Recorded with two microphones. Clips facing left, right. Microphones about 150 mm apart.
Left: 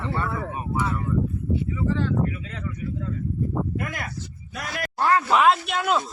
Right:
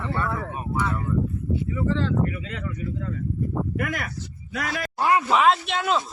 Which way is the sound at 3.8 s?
90° right.